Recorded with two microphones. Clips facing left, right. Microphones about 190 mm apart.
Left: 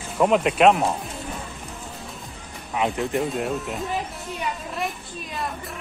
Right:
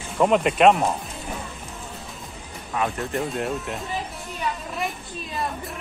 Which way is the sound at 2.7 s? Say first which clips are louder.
Left 2 dB; 15° left (ahead or behind).